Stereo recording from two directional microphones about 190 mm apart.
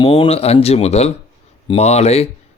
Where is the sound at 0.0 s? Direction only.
30° left (ahead or behind).